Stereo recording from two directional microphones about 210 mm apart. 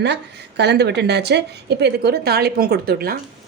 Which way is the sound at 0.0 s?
55° right (ahead or behind).